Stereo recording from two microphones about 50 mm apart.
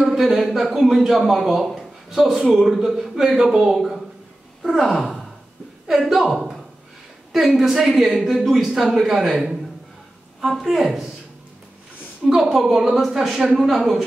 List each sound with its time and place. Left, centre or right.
0.1 s a man's voice: centre
12.4 s a man's voice: centre